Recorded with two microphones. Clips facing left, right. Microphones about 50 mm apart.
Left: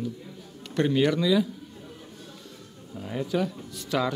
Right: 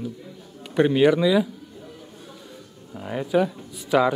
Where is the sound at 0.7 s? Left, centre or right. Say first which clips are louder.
Right 6 dB; centre.